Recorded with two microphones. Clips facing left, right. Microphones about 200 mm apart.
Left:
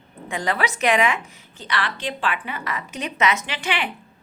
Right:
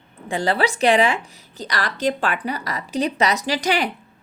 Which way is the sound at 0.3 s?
30° right (ahead or behind).